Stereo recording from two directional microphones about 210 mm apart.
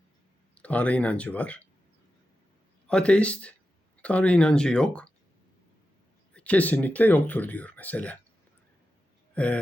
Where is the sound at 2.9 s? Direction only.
5° left (ahead or behind).